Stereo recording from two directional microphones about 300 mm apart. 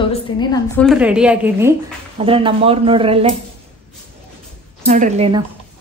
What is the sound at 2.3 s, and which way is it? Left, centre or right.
Speech, centre.